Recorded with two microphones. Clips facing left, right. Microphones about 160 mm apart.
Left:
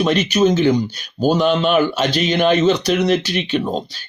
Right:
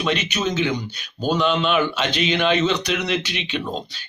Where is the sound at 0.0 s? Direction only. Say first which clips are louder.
Left 8 dB; 40° left (ahead or behind).